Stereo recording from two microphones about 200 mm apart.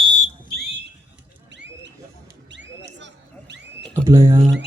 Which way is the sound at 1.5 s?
60° right (ahead or behind).